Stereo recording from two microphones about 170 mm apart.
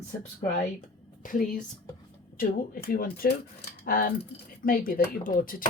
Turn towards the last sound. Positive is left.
turn(degrees=55)  # may be behind; listen again after turning